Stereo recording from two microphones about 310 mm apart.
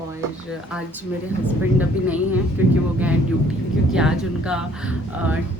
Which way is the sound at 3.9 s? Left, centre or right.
Centre.